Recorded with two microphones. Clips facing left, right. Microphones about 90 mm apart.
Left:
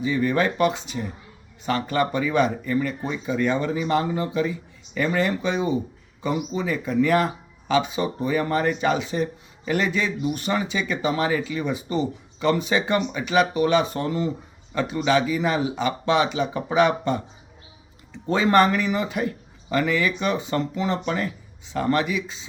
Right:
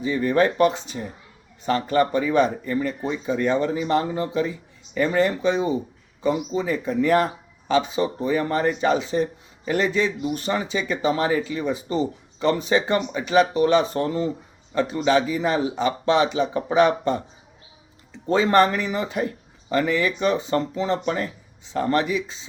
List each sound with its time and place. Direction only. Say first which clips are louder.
0.0 s speech: right 2 dB; 35° right (ahead or behind)